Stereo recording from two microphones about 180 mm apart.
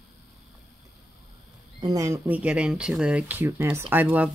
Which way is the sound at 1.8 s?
15° right (ahead or behind).